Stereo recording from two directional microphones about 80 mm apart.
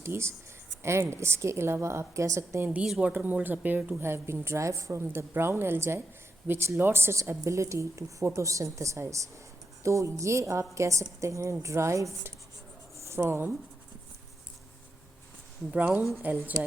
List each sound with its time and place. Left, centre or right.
0.0 s a woman's voice: right
3.0 s speech: right
4.0 s a woman's voice: right
16.2 s speech: right